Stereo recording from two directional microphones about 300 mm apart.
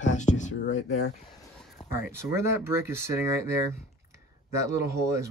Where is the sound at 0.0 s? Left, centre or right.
Left.